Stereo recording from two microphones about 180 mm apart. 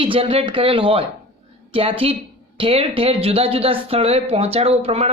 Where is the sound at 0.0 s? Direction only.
30° right (ahead or behind).